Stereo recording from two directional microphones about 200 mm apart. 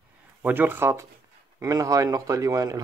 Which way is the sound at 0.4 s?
10° right (ahead or behind).